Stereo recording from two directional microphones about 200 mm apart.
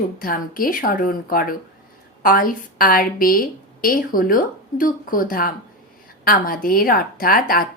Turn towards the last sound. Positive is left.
turn(degrees=45)  # may be behind; listen again after turning